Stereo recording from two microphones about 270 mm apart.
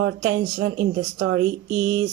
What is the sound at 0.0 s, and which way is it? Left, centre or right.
Speech, right.